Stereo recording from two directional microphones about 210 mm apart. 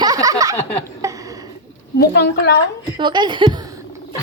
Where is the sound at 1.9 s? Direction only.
50° left (ahead or behind).